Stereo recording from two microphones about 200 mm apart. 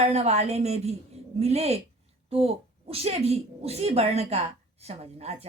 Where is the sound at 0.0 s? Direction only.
35° right (ahead or behind).